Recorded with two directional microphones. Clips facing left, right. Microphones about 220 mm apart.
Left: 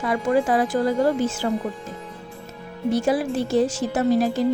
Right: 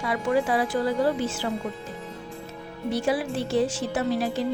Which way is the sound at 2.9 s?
45° left (ahead or behind).